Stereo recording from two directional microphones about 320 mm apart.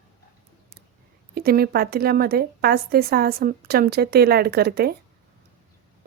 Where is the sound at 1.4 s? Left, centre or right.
Right.